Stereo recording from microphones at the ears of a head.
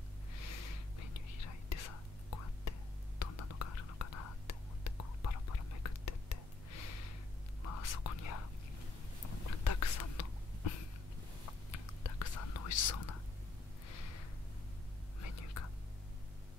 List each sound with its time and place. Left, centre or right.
0.4 s whispering: left
13.8 s a sound: left
15.1 s whispering: left